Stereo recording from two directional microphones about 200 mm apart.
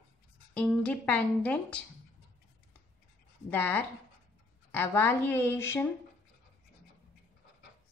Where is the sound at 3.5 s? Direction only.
10° left (ahead or behind).